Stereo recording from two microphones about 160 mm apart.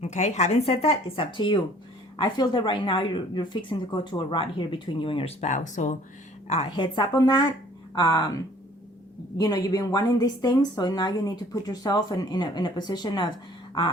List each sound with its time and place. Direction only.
0.0 s speech: 45° left (ahead or behind)
6.5 s a woman's voice: 35° left (ahead or behind)
9.4 s a woman's voice: 20° left (ahead or behind)